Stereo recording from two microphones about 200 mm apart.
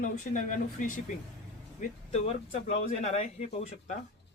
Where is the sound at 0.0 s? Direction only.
40° left (ahead or behind).